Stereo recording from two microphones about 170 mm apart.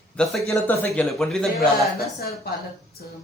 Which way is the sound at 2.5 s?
70° left (ahead or behind).